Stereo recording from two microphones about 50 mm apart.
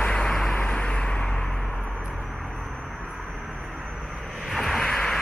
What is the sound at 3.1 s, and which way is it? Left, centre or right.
Vehicle, centre.